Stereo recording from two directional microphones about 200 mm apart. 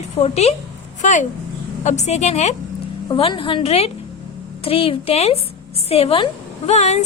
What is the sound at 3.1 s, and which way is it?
A woman's voice, 25° left (ahead or behind).